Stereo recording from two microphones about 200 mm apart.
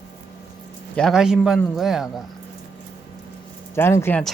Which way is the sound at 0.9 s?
Centre (ahead or behind).